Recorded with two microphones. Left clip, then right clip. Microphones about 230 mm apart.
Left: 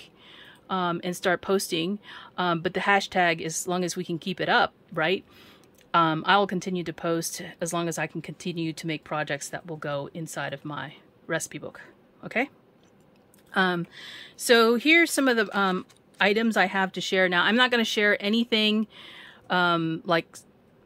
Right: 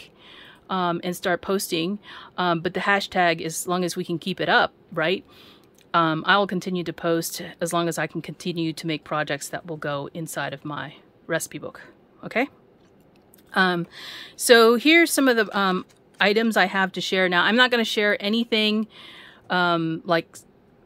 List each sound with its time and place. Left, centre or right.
0.0 s speech: centre